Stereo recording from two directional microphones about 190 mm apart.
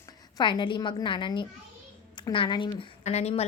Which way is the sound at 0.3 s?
25° left (ahead or behind).